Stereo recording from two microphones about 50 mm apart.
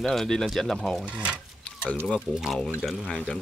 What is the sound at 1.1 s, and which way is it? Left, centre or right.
Speech, right.